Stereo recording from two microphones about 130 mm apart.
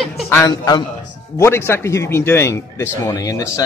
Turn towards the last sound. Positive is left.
turn(degrees=25)  # may be behind; listen again after turning